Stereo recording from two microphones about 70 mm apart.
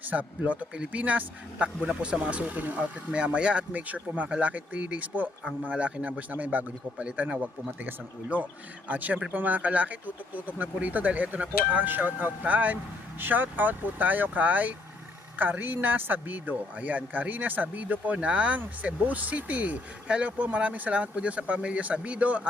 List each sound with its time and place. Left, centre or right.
0.1 s speech: right